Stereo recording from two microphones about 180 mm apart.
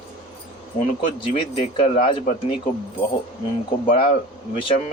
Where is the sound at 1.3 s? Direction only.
30° left (ahead or behind).